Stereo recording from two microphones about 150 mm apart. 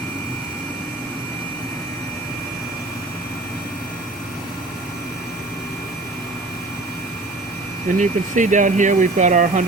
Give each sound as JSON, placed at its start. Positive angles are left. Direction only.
{"t": 7.9, "sound": "speech", "side_deg": -55}